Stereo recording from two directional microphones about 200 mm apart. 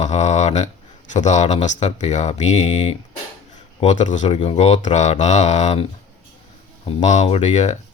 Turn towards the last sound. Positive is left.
turn(degrees=35)  # may be behind; listen again after turning